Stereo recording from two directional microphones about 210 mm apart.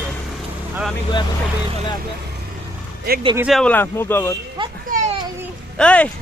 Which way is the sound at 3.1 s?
45° right (ahead or behind).